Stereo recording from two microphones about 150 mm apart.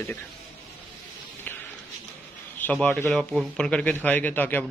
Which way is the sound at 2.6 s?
5° left (ahead or behind).